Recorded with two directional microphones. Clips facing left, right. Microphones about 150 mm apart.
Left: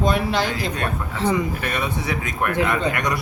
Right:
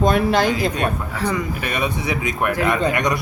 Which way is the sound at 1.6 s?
15° right (ahead or behind).